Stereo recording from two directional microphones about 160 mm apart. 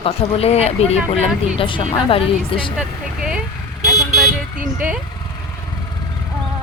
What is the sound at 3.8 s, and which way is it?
Vehicle, centre (ahead or behind).